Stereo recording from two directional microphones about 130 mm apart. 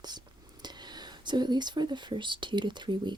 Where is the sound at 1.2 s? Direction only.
35° right (ahead or behind).